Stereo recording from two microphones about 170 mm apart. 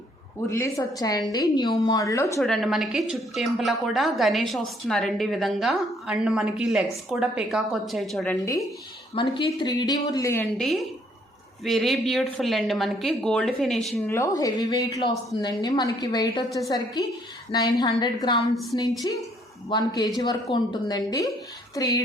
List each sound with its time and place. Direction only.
0.5 s a woman's voice: 15° left (ahead or behind)
2.4 s a woman's voice: centre (ahead or behind)
9.2 s a woman's voice: 30° left (ahead or behind)
10.6 s a woman's voice: centre (ahead or behind)
14.1 s a woman's voice: 20° left (ahead or behind)
18.5 s a woman's voice: centre (ahead or behind)
19.1 s a woman's voice: 25° left (ahead or behind)